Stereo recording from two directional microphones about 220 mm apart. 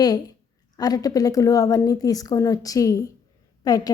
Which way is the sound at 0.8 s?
15° left (ahead or behind).